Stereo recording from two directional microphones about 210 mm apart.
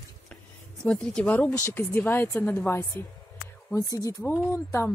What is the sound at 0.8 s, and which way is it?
Speech, 5° left (ahead or behind).